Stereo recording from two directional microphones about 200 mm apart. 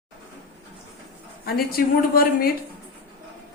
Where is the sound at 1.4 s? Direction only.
45° left (ahead or behind).